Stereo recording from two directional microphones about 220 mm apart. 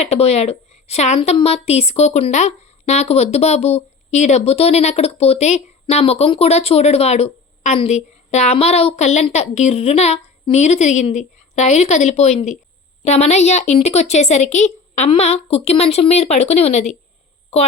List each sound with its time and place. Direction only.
0.0 s a woman's voice: 30° left (ahead or behind)